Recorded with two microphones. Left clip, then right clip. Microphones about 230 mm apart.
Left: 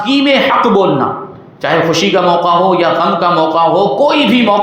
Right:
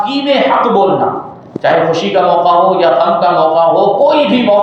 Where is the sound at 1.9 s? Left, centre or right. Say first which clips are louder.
Even; left.